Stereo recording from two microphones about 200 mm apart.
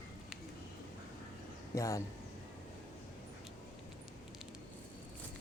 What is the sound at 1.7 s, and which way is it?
Speech, 15° left (ahead or behind).